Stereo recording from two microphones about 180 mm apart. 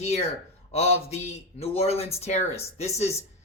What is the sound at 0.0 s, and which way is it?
Speech, 35° left (ahead or behind).